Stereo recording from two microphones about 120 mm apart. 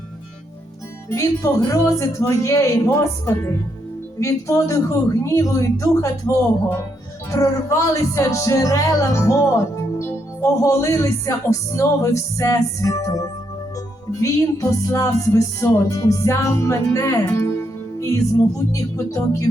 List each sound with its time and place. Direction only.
1.1 s music: 25° left (ahead or behind)
18.7 s music: 25° left (ahead or behind)